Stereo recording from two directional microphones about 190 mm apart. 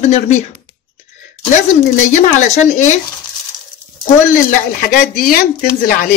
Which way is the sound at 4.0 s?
45° left (ahead or behind).